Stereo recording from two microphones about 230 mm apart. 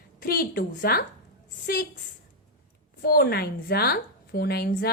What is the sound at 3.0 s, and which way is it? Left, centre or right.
A woman's voice, left.